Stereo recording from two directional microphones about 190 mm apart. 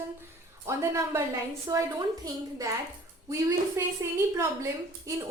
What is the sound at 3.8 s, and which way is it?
A woman's voice, 15° right (ahead or behind).